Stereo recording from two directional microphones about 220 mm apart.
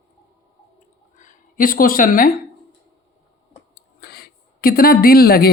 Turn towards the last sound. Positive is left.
turn(degrees=45)  # may be behind; listen again after turning